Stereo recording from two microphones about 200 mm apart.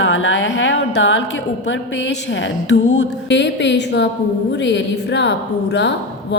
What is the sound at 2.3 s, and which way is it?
A woman's voice, 65° left (ahead or behind).